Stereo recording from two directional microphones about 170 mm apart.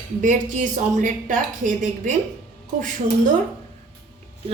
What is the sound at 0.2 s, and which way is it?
A woman's voice, 50° right (ahead or behind).